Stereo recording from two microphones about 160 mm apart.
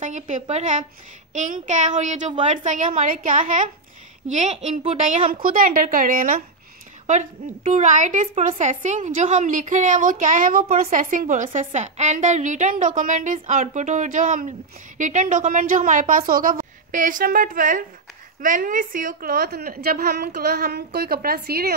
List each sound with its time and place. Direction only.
0.0 s a woman's voice: 50° right (ahead or behind)
7.1 s a woman's voice: 50° right (ahead or behind); by 21.7 s 75° right (ahead or behind)